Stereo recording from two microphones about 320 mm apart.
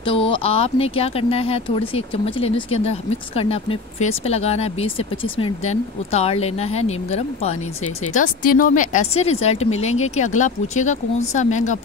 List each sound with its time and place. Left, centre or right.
0.0 s speech: centre